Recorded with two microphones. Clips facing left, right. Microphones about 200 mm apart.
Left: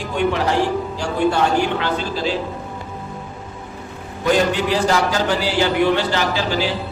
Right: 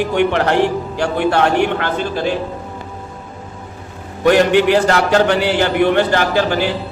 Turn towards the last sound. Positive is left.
turn(degrees=-55)  # may be behind; listen again after turning